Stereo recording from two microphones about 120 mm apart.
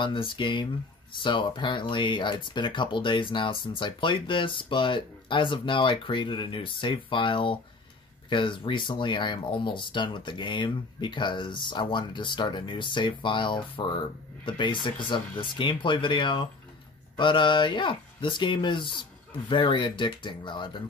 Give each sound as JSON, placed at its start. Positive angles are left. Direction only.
{"t": 0.0, "sound": "speech", "side_deg": 45}